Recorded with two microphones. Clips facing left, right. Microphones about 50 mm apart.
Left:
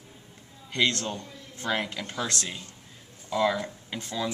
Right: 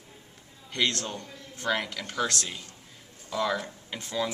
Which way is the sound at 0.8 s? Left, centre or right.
Left.